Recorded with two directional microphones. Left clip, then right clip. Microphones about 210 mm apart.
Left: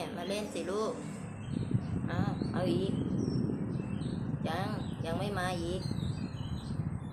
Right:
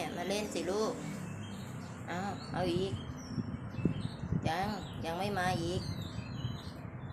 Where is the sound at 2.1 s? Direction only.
5° right (ahead or behind).